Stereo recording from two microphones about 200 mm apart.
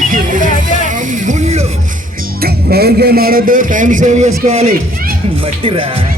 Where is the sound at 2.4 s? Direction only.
50° right (ahead or behind); by 4.7 s 35° right (ahead or behind).